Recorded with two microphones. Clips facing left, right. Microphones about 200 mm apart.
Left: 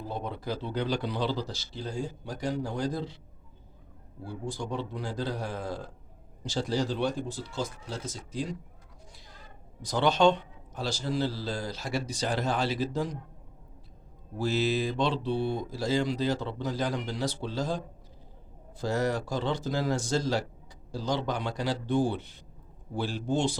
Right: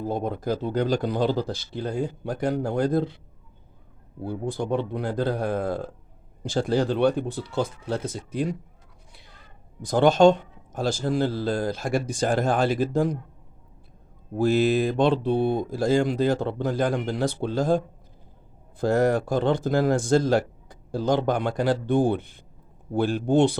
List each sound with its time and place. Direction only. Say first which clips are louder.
0.0 s a man's voice: right 8 dB; 50° right (ahead or behind)
4.2 s speech: right 7 dB; 55° right (ahead or behind)
9.1 s a sound: even; 60° right (ahead or behind)
9.8 s a man's voice: right 7 dB; 50° right (ahead or behind)
14.3 s a man's voice: right 7 dB; 55° right (ahead or behind)